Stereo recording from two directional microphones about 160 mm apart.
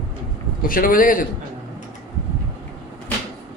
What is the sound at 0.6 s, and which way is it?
Speech, 60° left (ahead or behind).